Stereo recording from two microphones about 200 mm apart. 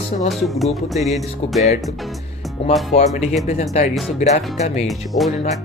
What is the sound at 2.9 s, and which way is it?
Speech, 35° left (ahead or behind).